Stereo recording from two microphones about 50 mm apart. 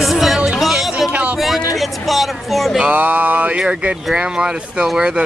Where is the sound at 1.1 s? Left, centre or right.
Right.